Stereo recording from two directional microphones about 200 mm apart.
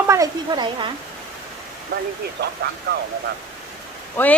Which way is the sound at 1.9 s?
50° right (ahead or behind).